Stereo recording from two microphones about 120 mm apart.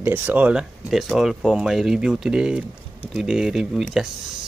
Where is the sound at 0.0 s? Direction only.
15° right (ahead or behind).